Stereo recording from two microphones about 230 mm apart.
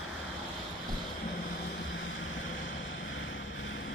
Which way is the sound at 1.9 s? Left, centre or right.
Left.